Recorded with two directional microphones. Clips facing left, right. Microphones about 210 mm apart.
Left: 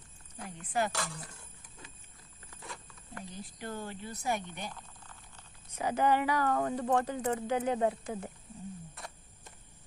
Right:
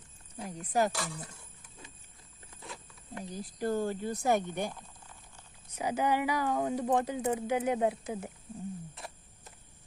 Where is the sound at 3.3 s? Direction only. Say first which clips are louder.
Right 10 dB; 40° right (ahead or behind).